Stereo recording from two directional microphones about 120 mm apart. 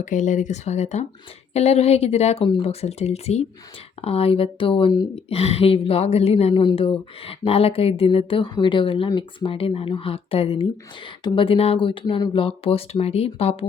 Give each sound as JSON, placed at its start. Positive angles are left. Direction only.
{"t": 0.0, "sound": "a woman's voice", "side_deg": 90}
{"t": 5.1, "sound": "a woman's voice", "side_deg": 60}
{"t": 6.5, "sound": "speech", "side_deg": 40}
{"t": 11.2, "sound": "speech", "side_deg": 40}